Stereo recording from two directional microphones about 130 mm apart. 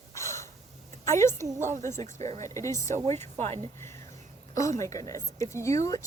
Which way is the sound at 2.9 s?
60° right (ahead or behind).